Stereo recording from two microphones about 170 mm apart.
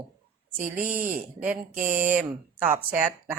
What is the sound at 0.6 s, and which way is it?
Speech, 55° right (ahead or behind).